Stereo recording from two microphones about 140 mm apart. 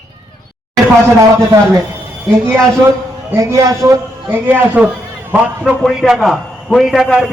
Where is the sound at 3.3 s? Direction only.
20° right (ahead or behind).